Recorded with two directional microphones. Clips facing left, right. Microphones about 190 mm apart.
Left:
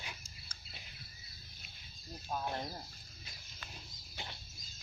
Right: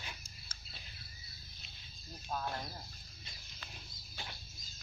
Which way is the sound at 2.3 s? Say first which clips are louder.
Left 1 dB; 20° left (ahead or behind).